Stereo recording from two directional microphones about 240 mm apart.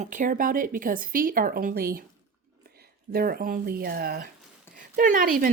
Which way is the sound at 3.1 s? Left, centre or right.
Right.